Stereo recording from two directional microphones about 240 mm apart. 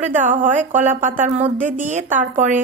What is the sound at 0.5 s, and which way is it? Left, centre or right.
A woman's voice, right.